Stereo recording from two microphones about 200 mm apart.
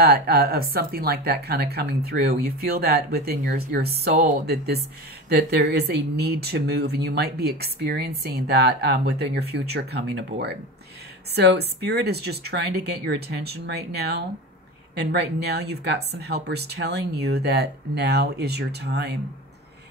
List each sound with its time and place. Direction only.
0.0 s speech: 50° right (ahead or behind)
5.3 s speech: 55° right (ahead or behind)